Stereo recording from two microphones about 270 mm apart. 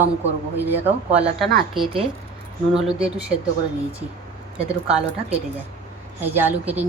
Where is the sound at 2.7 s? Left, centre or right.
Centre.